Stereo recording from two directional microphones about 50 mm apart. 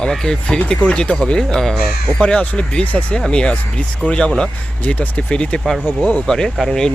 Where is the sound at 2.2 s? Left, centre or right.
Left.